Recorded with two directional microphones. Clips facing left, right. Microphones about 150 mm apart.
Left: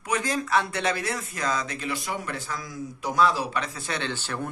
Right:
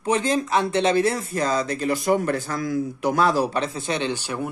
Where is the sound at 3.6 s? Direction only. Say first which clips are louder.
Right 6 dB; 25° right (ahead or behind).